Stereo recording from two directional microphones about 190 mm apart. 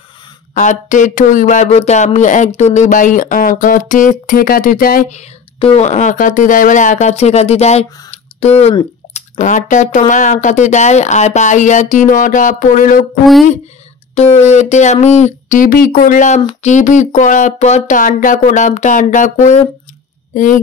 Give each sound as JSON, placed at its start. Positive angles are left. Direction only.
{"t": 0.6, "sound": "speech", "side_deg": 40}
{"t": 5.6, "sound": "speech", "side_deg": 35}
{"t": 14.1, "sound": "speech", "side_deg": 35}